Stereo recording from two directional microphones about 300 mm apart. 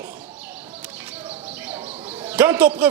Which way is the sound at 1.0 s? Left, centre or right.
Centre.